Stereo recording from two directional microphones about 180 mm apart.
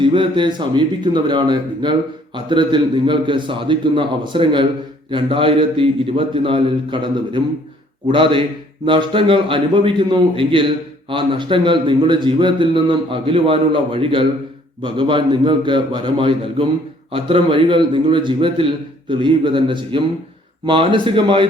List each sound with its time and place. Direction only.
0.0 s a man's voice: 25° right (ahead or behind)